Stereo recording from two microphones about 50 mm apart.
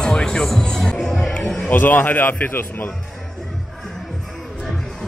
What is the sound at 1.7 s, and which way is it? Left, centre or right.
Speech, left.